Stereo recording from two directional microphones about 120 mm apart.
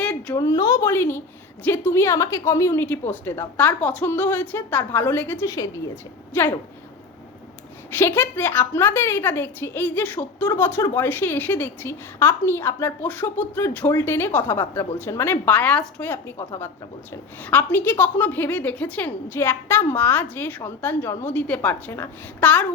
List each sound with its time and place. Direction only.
0.0 s a sound: 10° left (ahead or behind)
0.3 s a woman's voice: 30° left (ahead or behind)
6.3 s a woman's voice: 15° left (ahead or behind)
7.9 s a woman's voice: 15° left (ahead or behind)